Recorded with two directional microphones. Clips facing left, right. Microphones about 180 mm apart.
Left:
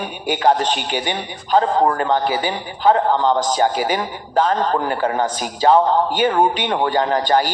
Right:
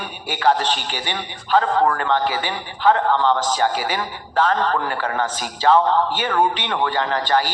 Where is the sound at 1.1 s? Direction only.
30° left (ahead or behind).